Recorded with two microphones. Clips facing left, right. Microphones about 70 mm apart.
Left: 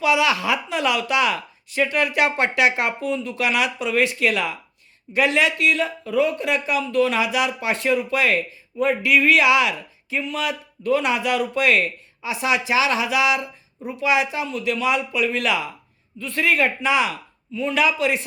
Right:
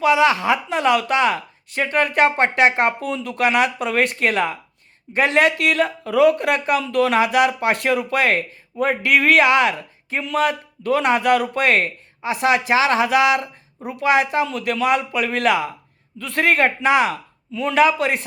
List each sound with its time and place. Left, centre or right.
0.0 s a woman's voice: right
3.1 s speech: right
3.4 s speech: right
6.8 s speech: right
16.1 s speech: right
17.5 s speech: right
17.7 s speech: right